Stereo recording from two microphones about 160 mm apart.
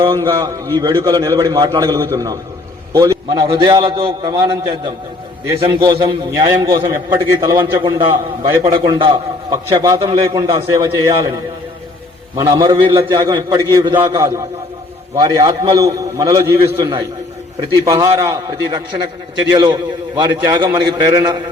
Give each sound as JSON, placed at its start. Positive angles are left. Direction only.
{"t": 0.0, "sound": "a man's voice", "side_deg": -30}
{"t": 2.9, "sound": "a sound", "side_deg": -20}
{"t": 3.3, "sound": "a man's voice", "side_deg": -35}
{"t": 12.4, "sound": "a man's voice", "side_deg": -25}